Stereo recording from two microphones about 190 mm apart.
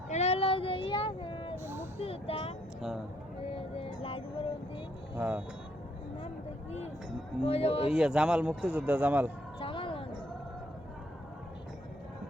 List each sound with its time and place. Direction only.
0.1 s child singing: 35° left (ahead or behind)
1.5 s a sound: 10° right (ahead or behind)
2.0 s speech: 30° left (ahead or behind)
3.5 s vehicle: 30° left (ahead or behind)
5.1 s speech: 10° right (ahead or behind)
6.7 s speech: 35° left (ahead or behind)
7.9 s speech: 5° right (ahead or behind)
9.6 s a sound: 30° left (ahead or behind)